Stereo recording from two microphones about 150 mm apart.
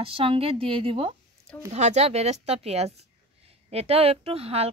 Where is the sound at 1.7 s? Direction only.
50° right (ahead or behind).